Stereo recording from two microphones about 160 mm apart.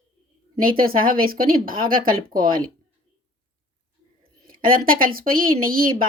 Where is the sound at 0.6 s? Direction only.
65° right (ahead or behind).